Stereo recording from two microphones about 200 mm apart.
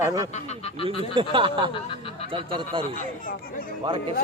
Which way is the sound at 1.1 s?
25° right (ahead or behind).